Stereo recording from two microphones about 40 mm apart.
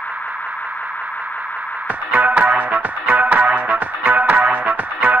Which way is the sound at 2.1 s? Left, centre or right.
Right.